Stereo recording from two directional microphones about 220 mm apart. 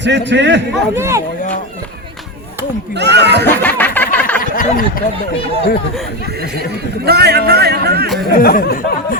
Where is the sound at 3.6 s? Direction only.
10° left (ahead or behind).